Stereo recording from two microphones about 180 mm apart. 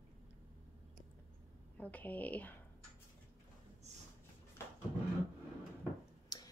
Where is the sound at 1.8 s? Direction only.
10° left (ahead or behind).